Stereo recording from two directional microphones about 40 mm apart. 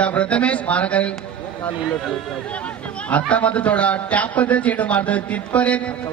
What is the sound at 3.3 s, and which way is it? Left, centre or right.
A man's voice, left.